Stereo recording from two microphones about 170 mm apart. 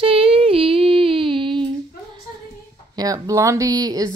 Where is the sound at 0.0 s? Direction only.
35° right (ahead or behind).